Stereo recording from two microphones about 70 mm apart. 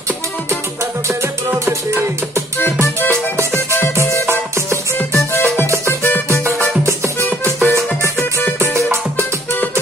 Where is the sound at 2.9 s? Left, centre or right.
Left.